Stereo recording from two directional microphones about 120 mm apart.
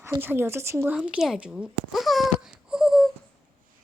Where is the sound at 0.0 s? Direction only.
20° right (ahead or behind).